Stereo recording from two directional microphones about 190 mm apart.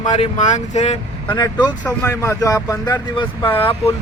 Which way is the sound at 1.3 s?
20° left (ahead or behind).